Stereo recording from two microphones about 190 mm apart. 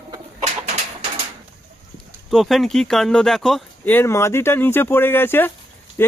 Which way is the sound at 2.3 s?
Centre (ahead or behind).